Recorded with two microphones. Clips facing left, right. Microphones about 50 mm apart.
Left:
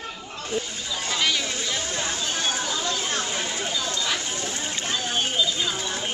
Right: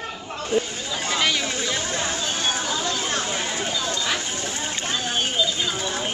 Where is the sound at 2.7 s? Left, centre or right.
Centre.